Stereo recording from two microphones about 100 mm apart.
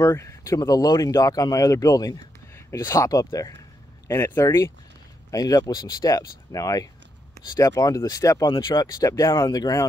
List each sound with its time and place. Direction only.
0.0 s speech: 30° left (ahead or behind)
5.3 s speech: 40° left (ahead or behind)
8.5 s speech: 50° left (ahead or behind)
9.0 s speech: 35° left (ahead or behind)